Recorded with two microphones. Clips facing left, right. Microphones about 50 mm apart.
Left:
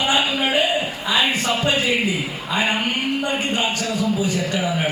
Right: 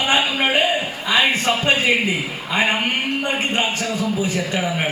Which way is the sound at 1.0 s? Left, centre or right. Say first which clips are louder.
Right 3 dB; right.